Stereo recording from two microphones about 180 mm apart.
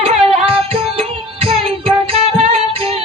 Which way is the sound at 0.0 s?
30° right (ahead or behind).